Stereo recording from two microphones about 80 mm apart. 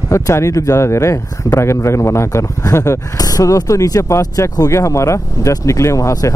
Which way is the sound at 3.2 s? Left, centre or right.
Left.